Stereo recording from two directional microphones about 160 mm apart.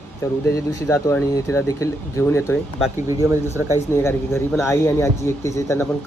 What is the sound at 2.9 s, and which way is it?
Speech, 20° right (ahead or behind).